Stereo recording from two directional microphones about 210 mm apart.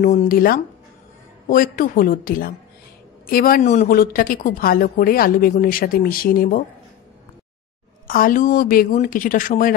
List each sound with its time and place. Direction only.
0.0 s a woman's voice: 40° left (ahead or behind)
8.1 s speech: 40° left (ahead or behind)